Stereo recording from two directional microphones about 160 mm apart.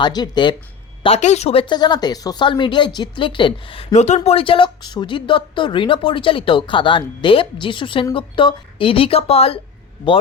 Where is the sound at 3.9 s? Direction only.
45° left (ahead or behind).